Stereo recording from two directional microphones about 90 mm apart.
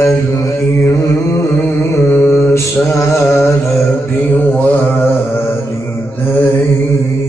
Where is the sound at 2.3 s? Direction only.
30° left (ahead or behind).